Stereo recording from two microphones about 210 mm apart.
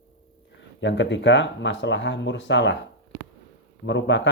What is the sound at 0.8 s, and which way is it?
Speech, 60° left (ahead or behind).